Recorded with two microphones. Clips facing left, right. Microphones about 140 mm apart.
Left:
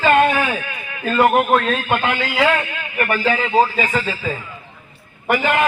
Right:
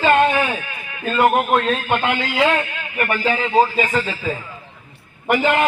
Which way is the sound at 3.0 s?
15° right (ahead or behind).